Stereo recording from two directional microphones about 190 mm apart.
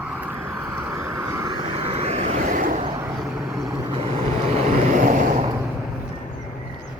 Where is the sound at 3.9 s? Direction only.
30° right (ahead or behind).